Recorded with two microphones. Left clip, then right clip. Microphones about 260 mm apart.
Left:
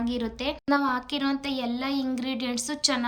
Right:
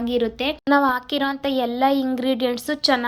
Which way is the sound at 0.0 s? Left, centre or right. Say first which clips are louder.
Right 8 dB; centre.